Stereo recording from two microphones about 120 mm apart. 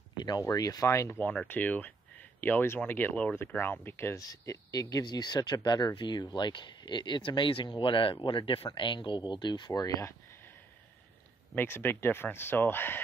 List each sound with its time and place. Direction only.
0.5 s speech: 30° left (ahead or behind)
1.2 s speech: 10° left (ahead or behind); by 10.1 s 30° left (ahead or behind)
11.5 s speech: 20° left (ahead or behind)